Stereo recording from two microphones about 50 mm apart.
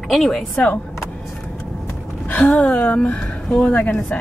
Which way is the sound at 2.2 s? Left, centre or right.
Left.